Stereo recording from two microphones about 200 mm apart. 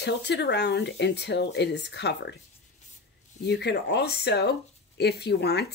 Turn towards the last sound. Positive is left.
turn(degrees=55)  # may be behind; listen again after turning